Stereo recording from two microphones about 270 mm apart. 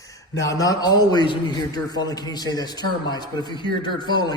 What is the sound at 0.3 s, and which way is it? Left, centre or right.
A man's voice, centre.